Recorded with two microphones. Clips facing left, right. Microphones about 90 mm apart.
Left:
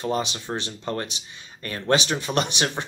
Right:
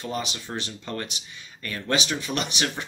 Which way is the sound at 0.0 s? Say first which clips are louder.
Left 5 dB; 30° left (ahead or behind).